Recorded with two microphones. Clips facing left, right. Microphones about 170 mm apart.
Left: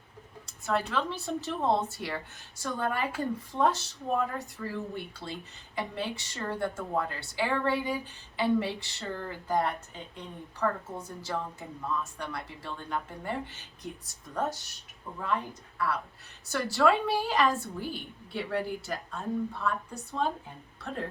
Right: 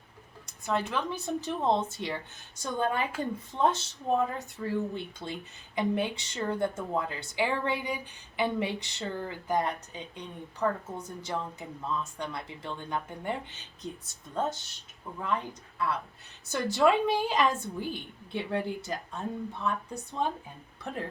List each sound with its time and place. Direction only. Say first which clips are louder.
0.4 s a woman's voice: even; 15° right (ahead or behind)